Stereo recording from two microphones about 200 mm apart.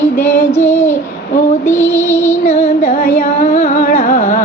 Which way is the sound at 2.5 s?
30° left (ahead or behind).